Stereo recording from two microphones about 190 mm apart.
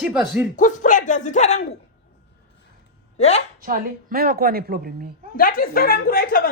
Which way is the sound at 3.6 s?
50° right (ahead or behind).